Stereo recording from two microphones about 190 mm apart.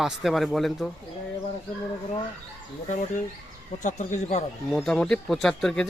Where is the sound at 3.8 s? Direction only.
40° left (ahead or behind).